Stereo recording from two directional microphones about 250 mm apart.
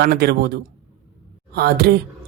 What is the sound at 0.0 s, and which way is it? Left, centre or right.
Speech, right.